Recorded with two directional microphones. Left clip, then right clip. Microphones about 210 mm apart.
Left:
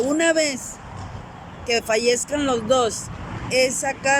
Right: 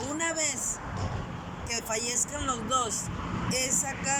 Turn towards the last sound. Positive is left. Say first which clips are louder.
# left 10 dB
turn(degrees=45)  # may be behind; listen again after turning